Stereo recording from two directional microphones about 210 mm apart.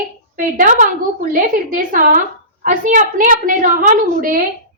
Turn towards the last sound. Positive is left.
turn(degrees=-40)  # may be behind; listen again after turning